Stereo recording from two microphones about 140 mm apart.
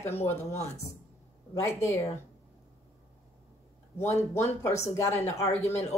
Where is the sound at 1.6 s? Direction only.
20° left (ahead or behind).